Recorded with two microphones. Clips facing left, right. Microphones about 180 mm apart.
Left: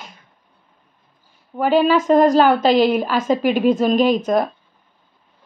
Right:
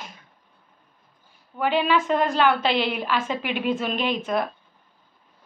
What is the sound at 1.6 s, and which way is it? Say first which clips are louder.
Speech: left 6 dB; 40° left (ahead or behind).